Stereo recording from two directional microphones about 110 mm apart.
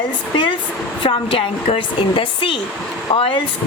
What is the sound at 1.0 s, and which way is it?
A woman's voice, 55° left (ahead or behind).